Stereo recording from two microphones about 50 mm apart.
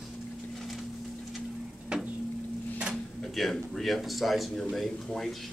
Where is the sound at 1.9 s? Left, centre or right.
Centre.